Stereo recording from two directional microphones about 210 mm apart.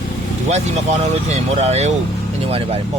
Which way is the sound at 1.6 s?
30° right (ahead or behind).